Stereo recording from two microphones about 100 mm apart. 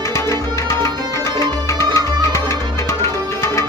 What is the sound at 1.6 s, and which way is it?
Tabla, 30° left (ahead or behind).